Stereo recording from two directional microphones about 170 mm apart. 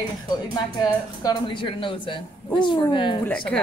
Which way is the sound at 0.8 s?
25° left (ahead or behind).